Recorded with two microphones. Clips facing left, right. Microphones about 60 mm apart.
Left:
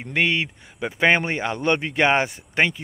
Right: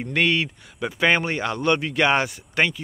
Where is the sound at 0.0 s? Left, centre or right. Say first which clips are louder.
Right 1 dB; centre.